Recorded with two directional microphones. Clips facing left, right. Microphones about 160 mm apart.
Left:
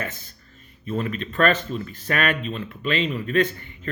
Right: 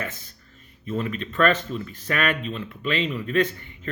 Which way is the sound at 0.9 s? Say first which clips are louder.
Left 1 dB; 40° left (ahead or behind).